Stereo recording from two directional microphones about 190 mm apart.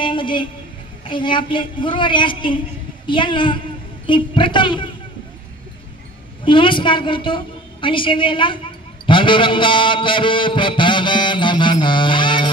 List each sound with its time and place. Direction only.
0.0 s a woman's voice: 25° left (ahead or behind)
1.0 s music: 25° left (ahead or behind)
6.4 s music: 25° left (ahead or behind)